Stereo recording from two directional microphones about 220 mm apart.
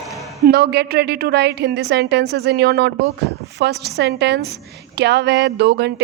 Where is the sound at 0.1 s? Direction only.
Centre (ahead or behind).